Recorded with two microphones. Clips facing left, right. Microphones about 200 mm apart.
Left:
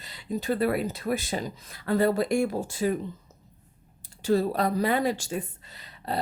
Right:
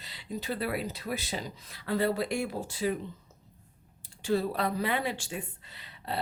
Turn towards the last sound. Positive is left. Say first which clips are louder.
# left 4 dB
turn(degrees=40)  # may be behind; listen again after turning